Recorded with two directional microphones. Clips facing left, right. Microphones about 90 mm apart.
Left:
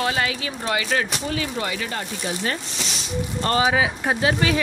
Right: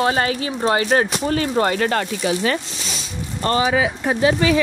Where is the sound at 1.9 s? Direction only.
80° right.